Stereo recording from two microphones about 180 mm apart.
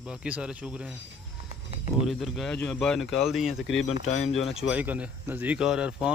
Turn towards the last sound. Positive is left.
turn(degrees=-5)  # may be behind; listen again after turning